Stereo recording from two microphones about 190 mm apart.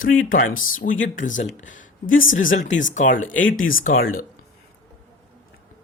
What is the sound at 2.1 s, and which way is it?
Speech, 90° left.